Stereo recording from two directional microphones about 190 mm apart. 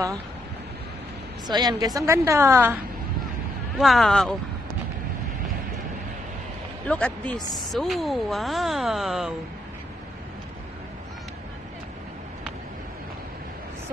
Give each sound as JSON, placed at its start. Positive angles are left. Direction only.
{"t": 1.5, "sound": "a woman's voice", "side_deg": -20}
{"t": 3.7, "sound": "speech", "side_deg": 0}
{"t": 6.9, "sound": "speech", "side_deg": 5}